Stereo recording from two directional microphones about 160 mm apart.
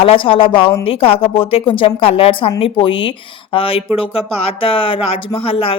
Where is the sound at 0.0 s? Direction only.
35° left (ahead or behind).